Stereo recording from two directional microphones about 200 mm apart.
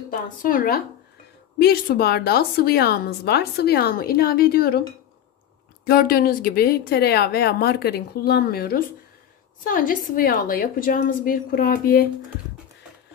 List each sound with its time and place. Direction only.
0.1 s speech: 45° left (ahead or behind)
5.9 s speech: 50° left (ahead or behind)